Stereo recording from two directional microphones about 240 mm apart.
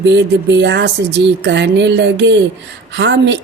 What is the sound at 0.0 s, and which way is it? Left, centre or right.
Speech, right.